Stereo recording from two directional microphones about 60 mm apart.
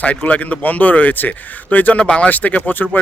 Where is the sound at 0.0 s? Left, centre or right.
Left.